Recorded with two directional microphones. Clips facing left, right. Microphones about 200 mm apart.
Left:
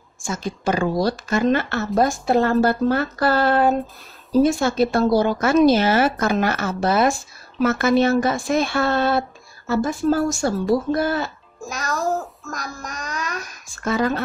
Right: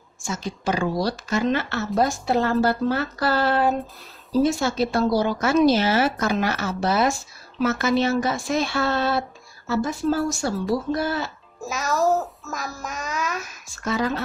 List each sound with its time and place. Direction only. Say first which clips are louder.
0.2 s a woman's voice: left 3 dB; 50° left (ahead or behind)
11.6 s a child's voice: right 3 dB; 5° right (ahead or behind)
13.8 s a woman's voice: left 3 dB; 50° left (ahead or behind)